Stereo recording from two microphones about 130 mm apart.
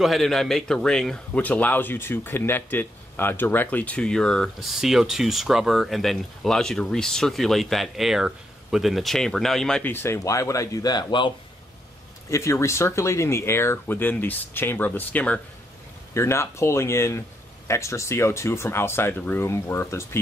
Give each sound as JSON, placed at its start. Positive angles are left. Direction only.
{"t": 0.0, "sound": "speech", "side_deg": 0}
{"t": 12.3, "sound": "speech", "side_deg": 25}
{"t": 16.1, "sound": "speech", "side_deg": 20}